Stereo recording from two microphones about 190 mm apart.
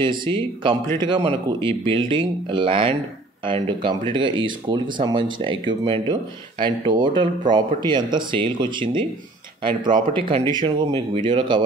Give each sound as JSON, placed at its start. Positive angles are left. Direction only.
{"t": 0.0, "sound": "speech", "side_deg": -25}